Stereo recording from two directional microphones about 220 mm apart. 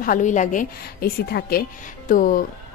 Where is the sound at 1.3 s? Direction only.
45° left (ahead or behind).